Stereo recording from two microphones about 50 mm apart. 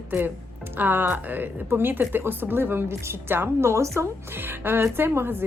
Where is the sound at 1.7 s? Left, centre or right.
Right.